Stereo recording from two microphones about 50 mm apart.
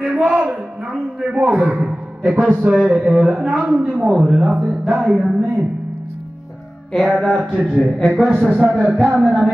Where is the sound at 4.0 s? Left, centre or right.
Centre.